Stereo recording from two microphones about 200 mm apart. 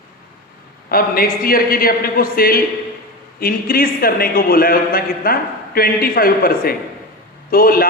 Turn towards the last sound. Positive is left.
turn(degrees=45)  # may be behind; listen again after turning